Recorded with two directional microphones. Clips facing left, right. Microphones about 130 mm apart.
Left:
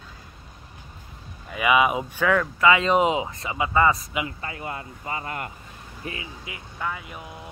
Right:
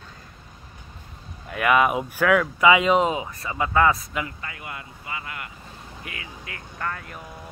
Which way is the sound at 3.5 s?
5° left (ahead or behind).